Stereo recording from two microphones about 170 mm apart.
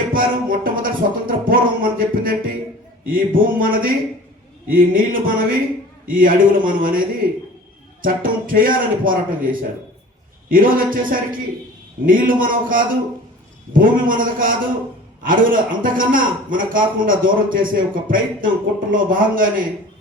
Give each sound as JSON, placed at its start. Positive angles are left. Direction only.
{"t": 0.1, "sound": "music", "side_deg": -55}
{"t": 3.1, "sound": "a man's voice", "side_deg": -55}
{"t": 8.0, "sound": "a man's voice", "side_deg": -55}